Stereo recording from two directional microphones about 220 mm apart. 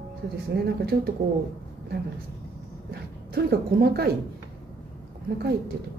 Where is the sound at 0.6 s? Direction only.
45° right (ahead or behind).